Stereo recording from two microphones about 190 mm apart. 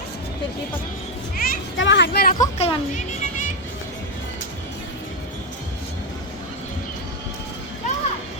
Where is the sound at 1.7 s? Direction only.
75° left (ahead or behind).